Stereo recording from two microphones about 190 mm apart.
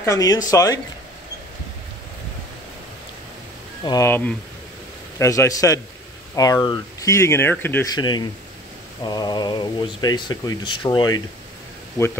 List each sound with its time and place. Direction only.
0.0 s speech: 20° left (ahead or behind)
3.8 s speech: 15° left (ahead or behind)